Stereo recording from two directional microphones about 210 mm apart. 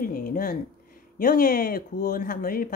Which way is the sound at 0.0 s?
40° left (ahead or behind).